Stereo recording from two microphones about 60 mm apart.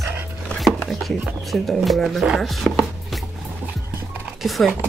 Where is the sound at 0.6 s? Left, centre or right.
Centre.